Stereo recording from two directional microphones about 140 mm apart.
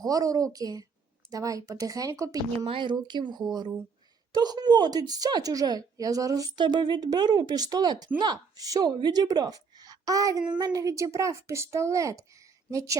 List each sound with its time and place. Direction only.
0.0 s a woman's voice: 25° right (ahead or behind)
2.6 s a woman's voice: 40° right (ahead or behind); by 13.0 s 25° right (ahead or behind)